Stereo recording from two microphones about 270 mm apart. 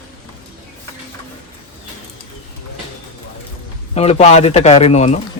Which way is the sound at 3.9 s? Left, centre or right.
Left.